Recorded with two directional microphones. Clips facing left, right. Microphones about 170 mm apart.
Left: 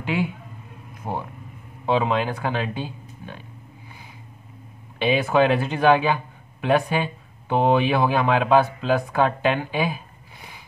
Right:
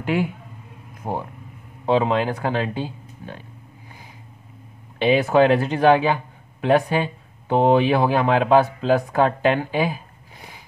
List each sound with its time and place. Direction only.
0.0 s speech: 45° right (ahead or behind)
4.9 s speech: 35° right (ahead or behind)